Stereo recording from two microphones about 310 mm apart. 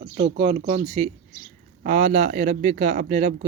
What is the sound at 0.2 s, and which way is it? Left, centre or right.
Speech, right.